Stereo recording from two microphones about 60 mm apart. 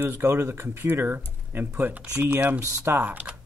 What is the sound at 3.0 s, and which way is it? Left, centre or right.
Speech, right.